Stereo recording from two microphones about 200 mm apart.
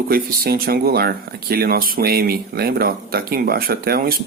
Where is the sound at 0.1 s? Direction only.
50° right (ahead or behind).